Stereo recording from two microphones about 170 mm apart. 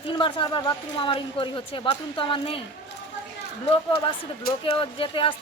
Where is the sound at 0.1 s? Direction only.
30° left (ahead or behind).